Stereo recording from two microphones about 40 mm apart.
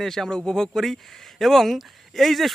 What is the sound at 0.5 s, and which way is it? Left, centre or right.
Speech, centre.